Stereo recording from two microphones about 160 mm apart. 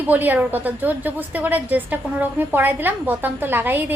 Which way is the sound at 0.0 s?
10° right (ahead or behind).